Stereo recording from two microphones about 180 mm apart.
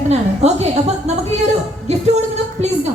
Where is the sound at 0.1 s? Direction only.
35° right (ahead or behind).